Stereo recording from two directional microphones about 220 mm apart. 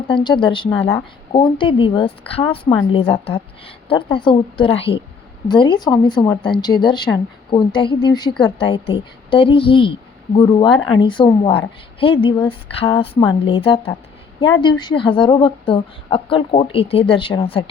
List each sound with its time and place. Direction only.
0.1 s speech: 20° left (ahead or behind)